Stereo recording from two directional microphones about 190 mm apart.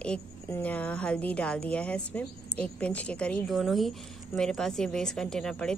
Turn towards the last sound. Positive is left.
turn(degrees=5)  # may be behind; listen again after turning